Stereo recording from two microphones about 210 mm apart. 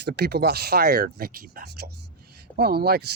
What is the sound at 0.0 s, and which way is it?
Speech, 50° right (ahead or behind).